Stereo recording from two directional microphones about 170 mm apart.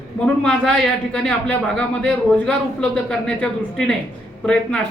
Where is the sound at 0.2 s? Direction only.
5° left (ahead or behind).